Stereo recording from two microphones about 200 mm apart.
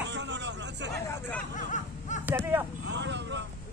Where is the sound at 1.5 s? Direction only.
40° left (ahead or behind).